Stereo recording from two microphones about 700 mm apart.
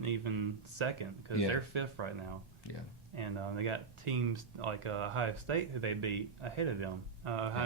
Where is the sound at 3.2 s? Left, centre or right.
Right.